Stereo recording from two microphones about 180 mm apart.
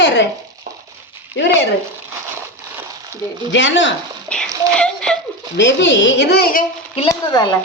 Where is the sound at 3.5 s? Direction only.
90° left.